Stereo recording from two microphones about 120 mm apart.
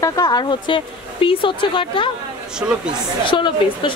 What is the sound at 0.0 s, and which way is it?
A woman's voice, 30° left (ahead or behind).